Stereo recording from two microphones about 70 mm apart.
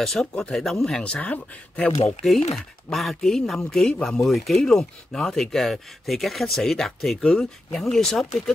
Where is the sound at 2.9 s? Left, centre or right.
Centre.